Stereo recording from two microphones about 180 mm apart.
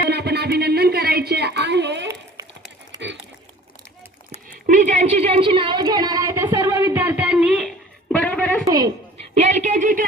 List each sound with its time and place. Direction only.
0.1 s speech: 65° right (ahead or behind)
4.6 s a woman's voice: 45° right (ahead or behind); by 7.7 s centre (ahead or behind)
8.1 s a sound: 5° left (ahead or behind)
8.6 s a woman's voice: 20° right (ahead or behind)
9.3 s speech: 40° right (ahead or behind)